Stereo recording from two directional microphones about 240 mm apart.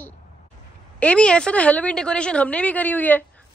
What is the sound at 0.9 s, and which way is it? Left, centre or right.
A woman's voice, centre.